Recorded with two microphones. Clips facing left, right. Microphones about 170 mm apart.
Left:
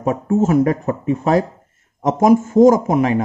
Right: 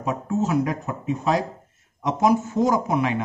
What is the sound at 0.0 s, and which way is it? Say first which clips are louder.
Speech: left 7 dB; 50° left (ahead or behind).